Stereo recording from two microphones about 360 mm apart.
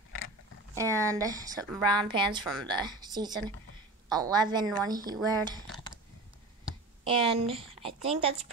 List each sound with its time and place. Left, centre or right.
0.7 s speech: centre
7.1 s a woman's voice: centre